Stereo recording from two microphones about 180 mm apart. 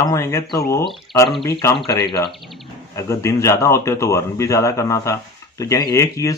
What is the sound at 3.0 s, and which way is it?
Speech, 15° left (ahead or behind).